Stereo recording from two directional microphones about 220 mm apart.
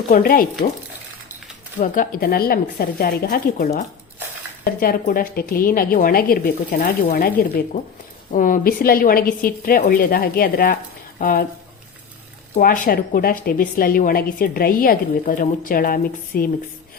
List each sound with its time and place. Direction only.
0.1 s a woman's voice: 40° left (ahead or behind)
1.8 s a woman's voice: 40° left (ahead or behind)
12.5 s a woman's voice: 40° left (ahead or behind)